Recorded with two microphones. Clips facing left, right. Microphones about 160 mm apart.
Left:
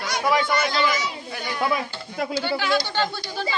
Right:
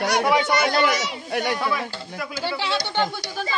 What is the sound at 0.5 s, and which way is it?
Speech, 60° right (ahead or behind).